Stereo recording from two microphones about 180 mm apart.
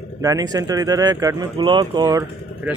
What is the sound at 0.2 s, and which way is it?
Speech, 20° right (ahead or behind).